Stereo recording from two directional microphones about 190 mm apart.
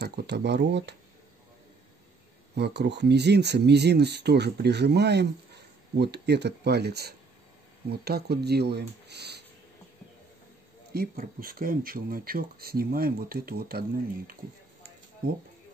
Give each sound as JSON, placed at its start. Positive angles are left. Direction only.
{"t": 0.0, "sound": "speech", "side_deg": -60}
{"t": 2.5, "sound": "speech", "side_deg": -60}
{"t": 10.9, "sound": "speech", "side_deg": -50}